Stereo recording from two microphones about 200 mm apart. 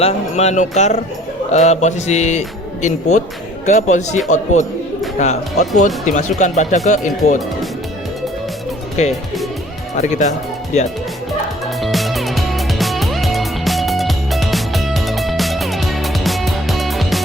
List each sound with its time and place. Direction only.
0.0 s speech: 35° left (ahead or behind)
5.2 s speech: 35° left (ahead or behind)
9.0 s speech: 35° left (ahead or behind)
11.8 s music: centre (ahead or behind)